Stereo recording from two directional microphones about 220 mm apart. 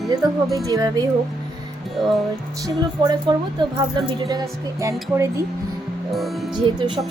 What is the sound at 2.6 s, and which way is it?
Speech, 20° right (ahead or behind).